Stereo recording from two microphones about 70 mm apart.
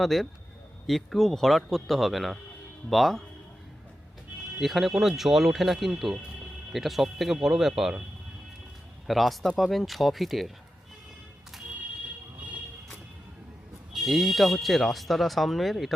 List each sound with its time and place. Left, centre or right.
0.0 s speech: centre
4.6 s speech: centre
9.0 s speech: centre
13.9 s speech: centre